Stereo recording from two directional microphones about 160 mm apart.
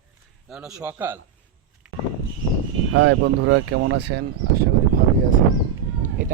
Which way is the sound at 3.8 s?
90° right.